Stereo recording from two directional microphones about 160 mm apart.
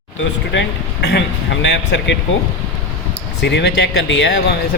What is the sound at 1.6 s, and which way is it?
Speech, 90° left.